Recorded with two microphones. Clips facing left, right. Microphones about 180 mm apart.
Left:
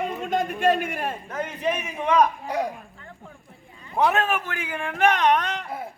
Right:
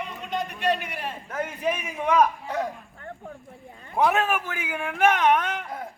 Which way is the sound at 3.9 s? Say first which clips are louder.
Even; 10° right (ahead or behind).